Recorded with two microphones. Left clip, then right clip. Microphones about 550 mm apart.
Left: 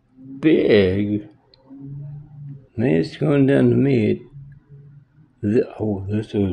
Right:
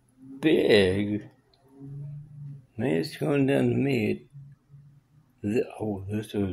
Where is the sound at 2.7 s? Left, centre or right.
Right.